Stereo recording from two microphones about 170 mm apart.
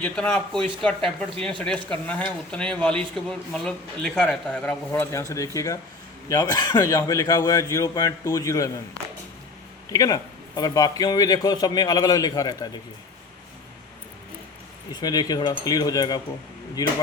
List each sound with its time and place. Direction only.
0.0 s a man's voice: 5° left (ahead or behind)
9.9 s a man's voice: 20° left (ahead or behind)
15.0 s a man's voice: 25° left (ahead or behind)